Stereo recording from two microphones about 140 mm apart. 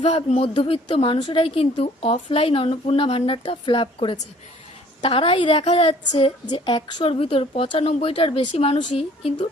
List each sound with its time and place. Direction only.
0.1 s a woman's voice: 45° left (ahead or behind)